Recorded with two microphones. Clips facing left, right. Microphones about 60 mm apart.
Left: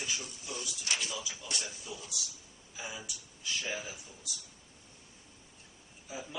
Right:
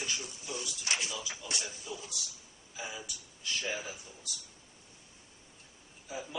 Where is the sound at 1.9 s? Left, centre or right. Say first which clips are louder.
Right 1 dB; centre.